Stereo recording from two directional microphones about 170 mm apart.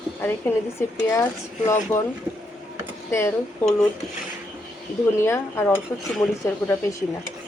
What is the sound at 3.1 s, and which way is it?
Speech, 15° left (ahead or behind).